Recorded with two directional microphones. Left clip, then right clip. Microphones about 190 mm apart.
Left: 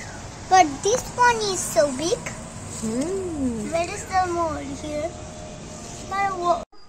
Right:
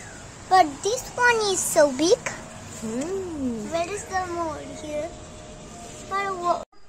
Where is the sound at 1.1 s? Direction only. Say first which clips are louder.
Right 1 dB; 60° right (ahead or behind).